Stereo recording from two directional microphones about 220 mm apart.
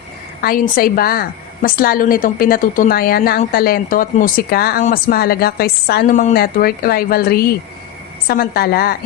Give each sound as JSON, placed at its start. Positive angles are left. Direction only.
{"t": 0.4, "sound": "a woman's voice", "side_deg": 40}